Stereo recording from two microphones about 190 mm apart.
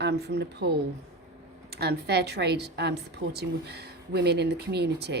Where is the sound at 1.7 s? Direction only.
55° right (ahead or behind).